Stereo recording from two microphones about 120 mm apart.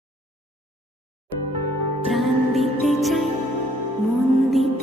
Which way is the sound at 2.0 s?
Centre (ahead or behind).